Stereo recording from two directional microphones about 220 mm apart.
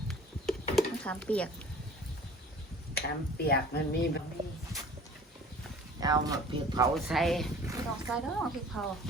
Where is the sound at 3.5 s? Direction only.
45° left (ahead or behind).